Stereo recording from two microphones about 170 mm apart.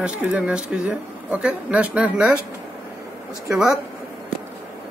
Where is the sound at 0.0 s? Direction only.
5° right (ahead or behind).